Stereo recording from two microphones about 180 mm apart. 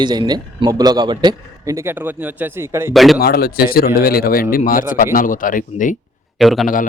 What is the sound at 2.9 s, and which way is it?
Speech, centre (ahead or behind).